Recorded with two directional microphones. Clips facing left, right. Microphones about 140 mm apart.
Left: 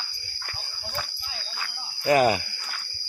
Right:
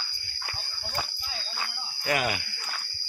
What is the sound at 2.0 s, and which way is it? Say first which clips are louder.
Speech: left 9 dB; 35° left (ahead or behind).